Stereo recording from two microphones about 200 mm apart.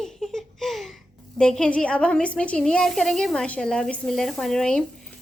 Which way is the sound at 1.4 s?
5° left (ahead or behind).